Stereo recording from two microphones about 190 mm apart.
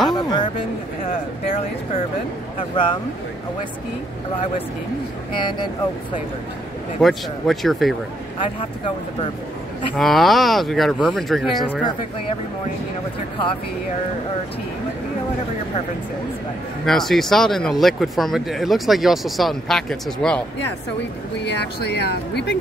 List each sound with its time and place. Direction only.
0.1 s speech: 20° left (ahead or behind)
2.7 s speech: 25° left (ahead or behind)
7.0 s speech: centre (ahead or behind)
9.9 s speech: centre (ahead or behind)
16.8 s speech: centre (ahead or behind)
21.5 s speech: 65° left (ahead or behind)